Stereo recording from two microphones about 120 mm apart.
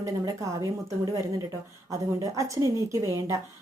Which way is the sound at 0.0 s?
25° right (ahead or behind).